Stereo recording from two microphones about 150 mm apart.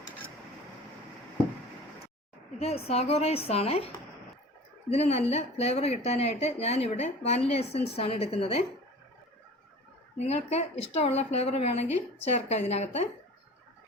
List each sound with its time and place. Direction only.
2.6 s a woman's voice: 45° left (ahead or behind)
10.2 s speech: 45° left (ahead or behind)